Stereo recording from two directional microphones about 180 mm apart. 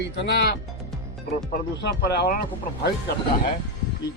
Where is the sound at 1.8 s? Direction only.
60° left (ahead or behind).